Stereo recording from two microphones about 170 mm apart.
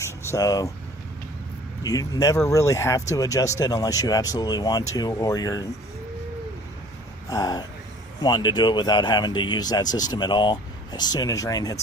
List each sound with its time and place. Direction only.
0.0 s air conditioning: 20° left (ahead or behind)
1.8 s speech: 20° left (ahead or behind)
7.3 s speech: 20° left (ahead or behind)